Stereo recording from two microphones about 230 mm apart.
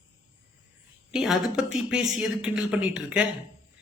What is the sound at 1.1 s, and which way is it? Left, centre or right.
A man's voice, centre.